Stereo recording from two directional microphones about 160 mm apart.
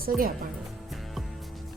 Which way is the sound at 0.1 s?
5° right (ahead or behind).